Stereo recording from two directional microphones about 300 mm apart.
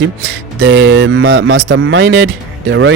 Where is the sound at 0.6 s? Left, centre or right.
Right.